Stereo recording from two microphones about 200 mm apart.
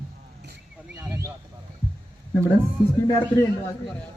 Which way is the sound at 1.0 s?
15° right (ahead or behind).